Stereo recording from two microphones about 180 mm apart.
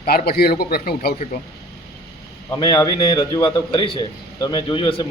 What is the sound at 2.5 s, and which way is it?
A man's voice, 20° left (ahead or behind).